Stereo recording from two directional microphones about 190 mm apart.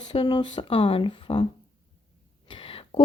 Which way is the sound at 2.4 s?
30° left (ahead or behind).